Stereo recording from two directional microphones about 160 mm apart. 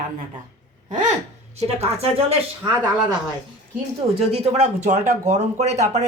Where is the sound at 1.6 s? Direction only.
40° right (ahead or behind).